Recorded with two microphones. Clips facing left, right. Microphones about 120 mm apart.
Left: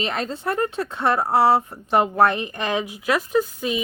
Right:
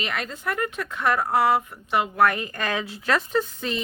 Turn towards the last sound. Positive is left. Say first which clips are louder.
# left 4 dB
turn(degrees=10)  # may be behind; listen again after turning